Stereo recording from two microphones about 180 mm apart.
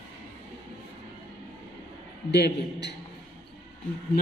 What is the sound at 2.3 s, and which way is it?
Speech, 65° left (ahead or behind).